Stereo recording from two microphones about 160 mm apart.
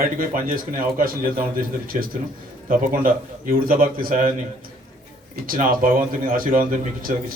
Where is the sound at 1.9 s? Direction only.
50° right (ahead or behind).